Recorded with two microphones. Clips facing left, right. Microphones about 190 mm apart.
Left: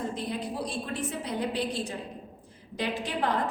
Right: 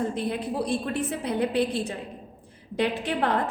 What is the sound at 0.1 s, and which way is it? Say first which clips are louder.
A woman's voice: right 5 dB; 60° right (ahead or behind).